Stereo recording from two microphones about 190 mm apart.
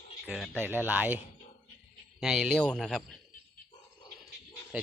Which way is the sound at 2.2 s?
5° right (ahead or behind).